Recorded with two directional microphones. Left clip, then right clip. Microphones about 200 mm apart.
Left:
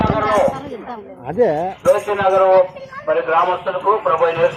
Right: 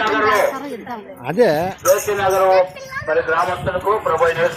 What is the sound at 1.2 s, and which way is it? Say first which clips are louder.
Speech: right 1 dB; 20° right (ahead or behind).